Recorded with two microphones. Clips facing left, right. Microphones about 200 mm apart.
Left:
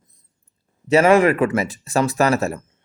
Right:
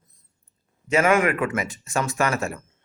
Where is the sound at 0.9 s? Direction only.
35° left (ahead or behind).